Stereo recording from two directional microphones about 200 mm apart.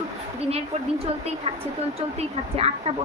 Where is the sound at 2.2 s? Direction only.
30° right (ahead or behind).